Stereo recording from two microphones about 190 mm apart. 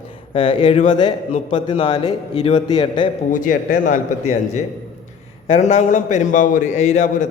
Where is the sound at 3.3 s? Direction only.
45° left (ahead or behind).